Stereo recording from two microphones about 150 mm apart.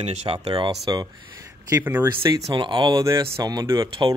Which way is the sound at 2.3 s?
30° right (ahead or behind).